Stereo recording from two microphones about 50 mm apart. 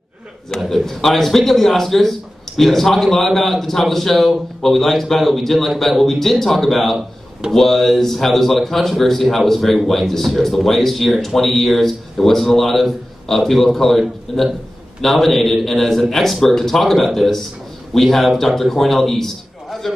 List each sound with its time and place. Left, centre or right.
0.6 s a man's voice: centre